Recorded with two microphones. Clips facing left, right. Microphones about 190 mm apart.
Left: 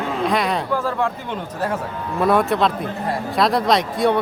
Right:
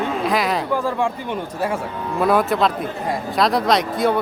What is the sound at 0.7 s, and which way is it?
Speech, 15° right (ahead or behind).